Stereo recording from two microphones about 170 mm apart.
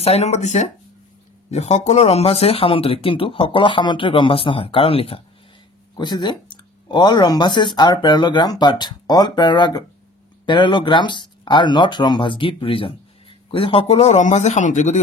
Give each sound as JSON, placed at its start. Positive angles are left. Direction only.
{"t": 0.0, "sound": "speech", "side_deg": 40}